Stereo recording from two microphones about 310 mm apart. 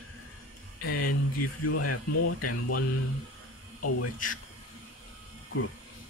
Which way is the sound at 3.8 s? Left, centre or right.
Left.